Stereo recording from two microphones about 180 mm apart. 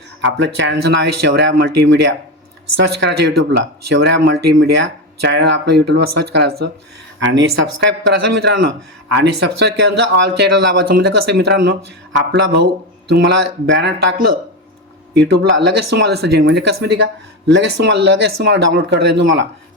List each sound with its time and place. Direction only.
0.3 s speech: 85° right
7.2 s speech: 90° right
8.4 s speech: 70° right (ahead or behind); by 19.5 s 85° right